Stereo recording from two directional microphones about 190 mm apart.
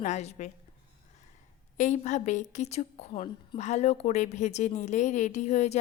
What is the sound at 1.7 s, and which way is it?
A woman's voice, 40° left (ahead or behind).